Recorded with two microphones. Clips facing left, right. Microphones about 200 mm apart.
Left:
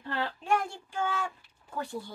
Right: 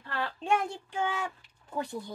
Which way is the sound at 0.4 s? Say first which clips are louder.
Right 3 dB; 25° right (ahead or behind).